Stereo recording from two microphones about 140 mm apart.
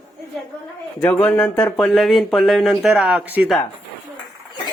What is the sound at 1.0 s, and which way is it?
Speech, 10° left (ahead or behind).